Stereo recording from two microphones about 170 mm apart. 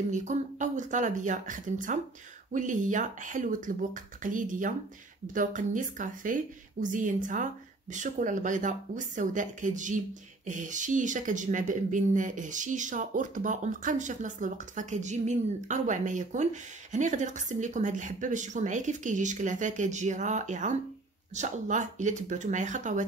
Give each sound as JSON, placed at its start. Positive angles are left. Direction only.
{"t": 0.1, "sound": "speech", "side_deg": -45}